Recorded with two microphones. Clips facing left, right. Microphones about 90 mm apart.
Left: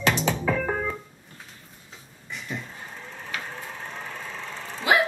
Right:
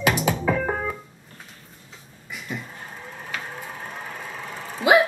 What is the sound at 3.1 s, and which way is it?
Vehicle, 10° right (ahead or behind).